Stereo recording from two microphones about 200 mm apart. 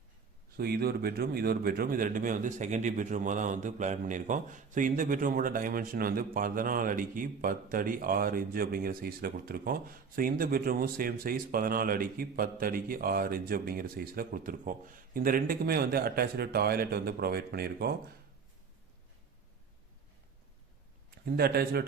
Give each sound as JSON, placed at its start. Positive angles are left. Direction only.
{"t": 0.5, "sound": "a man's voice", "side_deg": -50}
{"t": 21.2, "sound": "a man's voice", "side_deg": -50}